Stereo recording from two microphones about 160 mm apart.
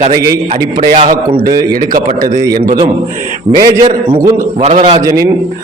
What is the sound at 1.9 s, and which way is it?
Speech, 60° right (ahead or behind).